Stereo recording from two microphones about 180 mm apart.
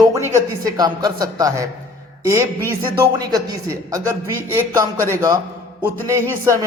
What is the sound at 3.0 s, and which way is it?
A man's voice, 20° right (ahead or behind).